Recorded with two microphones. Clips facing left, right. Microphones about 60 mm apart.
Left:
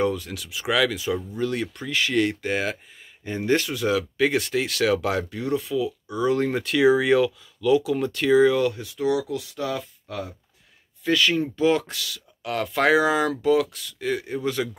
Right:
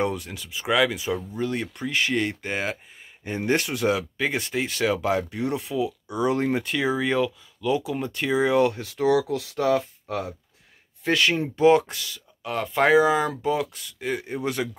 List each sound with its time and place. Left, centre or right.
0.0 s speech: right
0.3 s speech: centre
0.7 s speech: centre
3.4 s speech: right
4.2 s speech: centre
5.3 s speech: right
6.5 s speech: centre
6.8 s speech: centre
8.5 s speech: right
8.8 s speech: right
12.0 s speech: centre; by 14.6 s right